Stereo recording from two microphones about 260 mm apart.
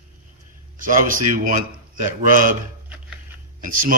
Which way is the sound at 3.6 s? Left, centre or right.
Right.